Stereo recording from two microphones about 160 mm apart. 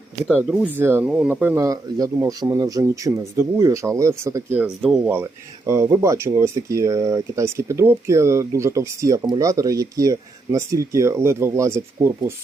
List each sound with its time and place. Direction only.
0.4 s speech: 5° right (ahead or behind)
4.6 s speech: 5° right (ahead or behind)